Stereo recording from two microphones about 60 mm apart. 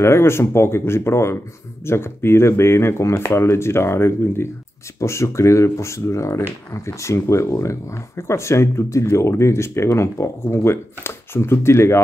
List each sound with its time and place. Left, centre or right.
0.0 s speech: left